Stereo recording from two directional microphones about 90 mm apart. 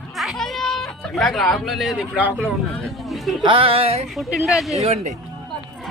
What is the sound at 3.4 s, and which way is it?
Speech, 90° right.